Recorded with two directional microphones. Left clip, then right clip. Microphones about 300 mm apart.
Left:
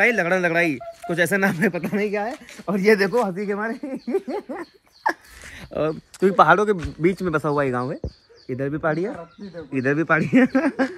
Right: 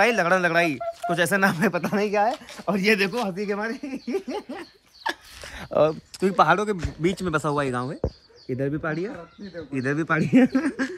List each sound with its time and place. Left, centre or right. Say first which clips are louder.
0.0 s speech: left 1 dB; centre
5.6 s a sound: right 5 dB; centre
5.9 s speech: left 3 dB; centre